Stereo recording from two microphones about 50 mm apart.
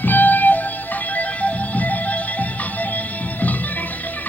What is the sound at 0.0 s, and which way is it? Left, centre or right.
Music, left.